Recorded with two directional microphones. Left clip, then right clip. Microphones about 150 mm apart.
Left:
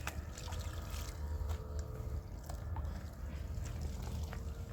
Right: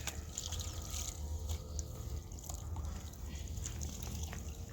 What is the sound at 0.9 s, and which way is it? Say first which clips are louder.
Boat: right 4 dB; centre (ahead or behind).